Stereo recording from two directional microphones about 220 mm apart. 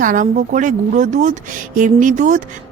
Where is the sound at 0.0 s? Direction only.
35° right (ahead or behind).